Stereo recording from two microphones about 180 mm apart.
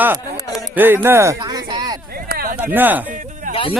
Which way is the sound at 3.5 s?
30° left (ahead or behind).